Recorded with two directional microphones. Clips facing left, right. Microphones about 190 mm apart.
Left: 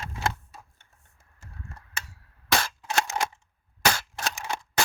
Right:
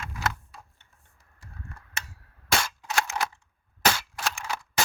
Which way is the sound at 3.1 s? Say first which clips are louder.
Left 1 dB; 25° left (ahead or behind).